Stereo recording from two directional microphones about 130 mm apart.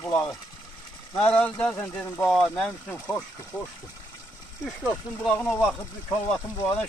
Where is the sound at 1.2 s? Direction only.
10° left (ahead or behind).